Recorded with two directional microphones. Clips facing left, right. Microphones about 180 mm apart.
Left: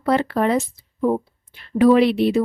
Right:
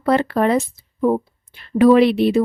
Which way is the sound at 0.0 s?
60° right (ahead or behind).